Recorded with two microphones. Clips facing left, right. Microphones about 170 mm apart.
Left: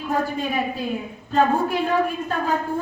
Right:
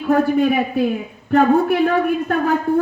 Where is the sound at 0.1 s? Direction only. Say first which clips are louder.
Right 9 dB; 65° right (ahead or behind).